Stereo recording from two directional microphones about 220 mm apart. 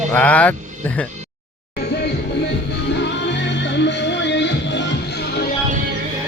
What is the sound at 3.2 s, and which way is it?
Music, 50° left (ahead or behind).